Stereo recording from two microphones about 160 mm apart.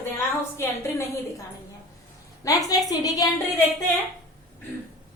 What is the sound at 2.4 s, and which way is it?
Speech, 20° left (ahead or behind).